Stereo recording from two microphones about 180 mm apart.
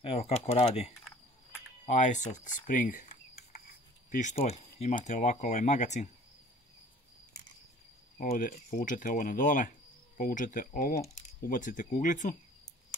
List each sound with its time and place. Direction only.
0.0 s speech: 35° left (ahead or behind)
8.2 s speech: 50° left (ahead or behind)